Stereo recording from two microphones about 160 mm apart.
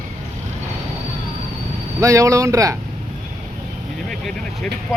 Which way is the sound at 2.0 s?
20° right (ahead or behind).